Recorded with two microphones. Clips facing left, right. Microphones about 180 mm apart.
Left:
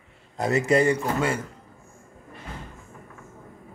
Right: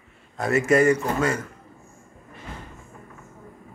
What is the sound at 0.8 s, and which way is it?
Speech, 30° left (ahead or behind).